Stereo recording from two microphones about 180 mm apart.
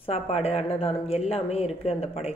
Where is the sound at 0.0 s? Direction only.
35° left (ahead or behind).